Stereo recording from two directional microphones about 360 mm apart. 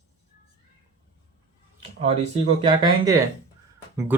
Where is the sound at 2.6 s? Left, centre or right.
Centre.